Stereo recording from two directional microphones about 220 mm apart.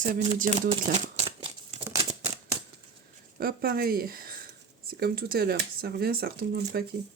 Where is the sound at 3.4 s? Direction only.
45° right (ahead or behind).